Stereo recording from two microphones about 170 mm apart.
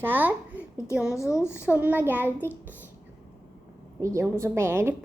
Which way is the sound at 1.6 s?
10° right (ahead or behind).